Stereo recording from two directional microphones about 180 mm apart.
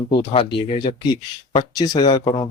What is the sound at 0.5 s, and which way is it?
Speech, 25° left (ahead or behind).